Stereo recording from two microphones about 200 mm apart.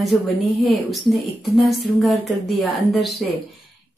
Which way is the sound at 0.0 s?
Centre (ahead or behind).